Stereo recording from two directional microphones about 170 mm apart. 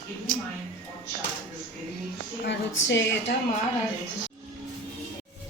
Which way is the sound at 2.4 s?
90° left.